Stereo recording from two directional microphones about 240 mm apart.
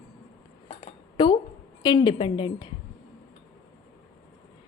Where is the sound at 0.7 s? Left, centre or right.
Left.